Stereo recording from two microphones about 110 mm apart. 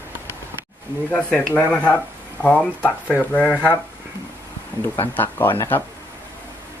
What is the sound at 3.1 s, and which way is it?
Speech, 15° left (ahead or behind).